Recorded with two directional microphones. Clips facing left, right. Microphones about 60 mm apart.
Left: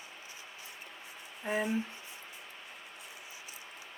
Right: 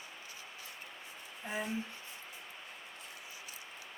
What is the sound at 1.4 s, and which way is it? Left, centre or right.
Speech, left.